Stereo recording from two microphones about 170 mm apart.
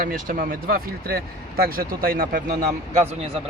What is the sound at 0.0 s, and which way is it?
Speech, 55° right (ahead or behind).